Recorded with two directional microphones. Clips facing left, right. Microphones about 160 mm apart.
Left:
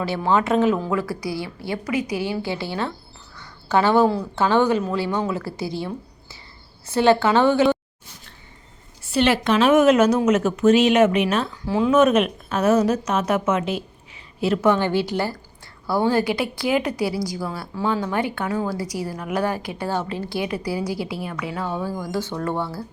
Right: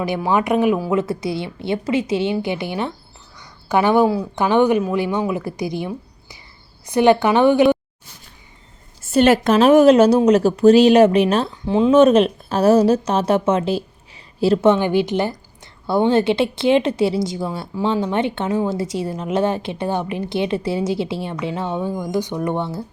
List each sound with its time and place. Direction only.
0.0 s a woman's voice: 15° right (ahead or behind)
9.0 s a woman's voice: 45° right (ahead or behind)
11.6 s a woman's voice: 20° right (ahead or behind)